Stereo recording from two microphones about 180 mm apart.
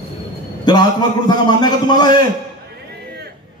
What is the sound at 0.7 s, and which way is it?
A man's voice, 25° left (ahead or behind).